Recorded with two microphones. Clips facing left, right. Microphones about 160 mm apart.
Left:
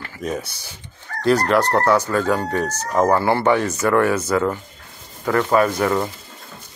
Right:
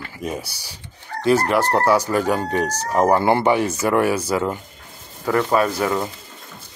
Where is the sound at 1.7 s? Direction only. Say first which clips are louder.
Even; 10° right (ahead or behind).